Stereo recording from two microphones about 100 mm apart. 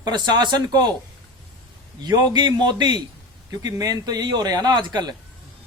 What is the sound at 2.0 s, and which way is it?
Speech, 45° right (ahead or behind).